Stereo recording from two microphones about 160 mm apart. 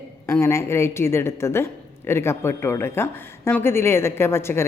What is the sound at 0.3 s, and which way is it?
A woman's voice, 15° left (ahead or behind).